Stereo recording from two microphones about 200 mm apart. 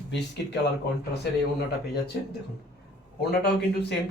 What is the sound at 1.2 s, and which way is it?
Speech, 55° left (ahead or behind).